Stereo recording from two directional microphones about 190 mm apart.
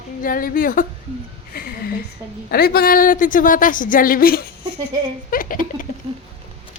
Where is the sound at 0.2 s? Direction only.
50° left (ahead or behind).